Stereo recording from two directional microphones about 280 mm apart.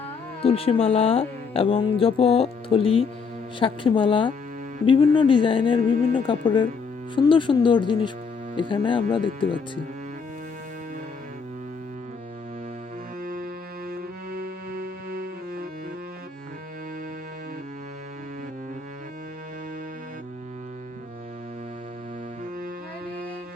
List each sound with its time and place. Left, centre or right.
0.4 s speech: centre
13.2 s music: right